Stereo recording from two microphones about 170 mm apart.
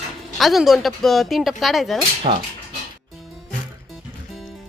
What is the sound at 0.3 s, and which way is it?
Speech, centre (ahead or behind).